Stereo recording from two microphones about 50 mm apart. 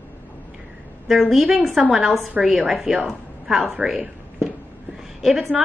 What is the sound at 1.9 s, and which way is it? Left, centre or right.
A woman's voice, centre.